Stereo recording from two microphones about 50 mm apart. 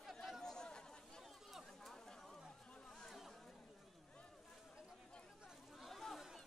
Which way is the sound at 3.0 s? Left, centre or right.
Centre.